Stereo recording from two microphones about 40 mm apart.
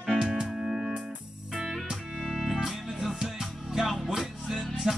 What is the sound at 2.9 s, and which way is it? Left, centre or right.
Music, centre.